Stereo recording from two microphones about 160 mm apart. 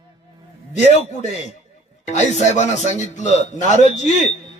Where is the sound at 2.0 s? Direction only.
45° left (ahead or behind).